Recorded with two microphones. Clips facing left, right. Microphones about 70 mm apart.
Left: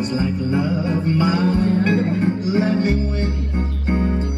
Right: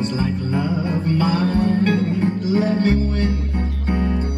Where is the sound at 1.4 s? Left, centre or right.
Right.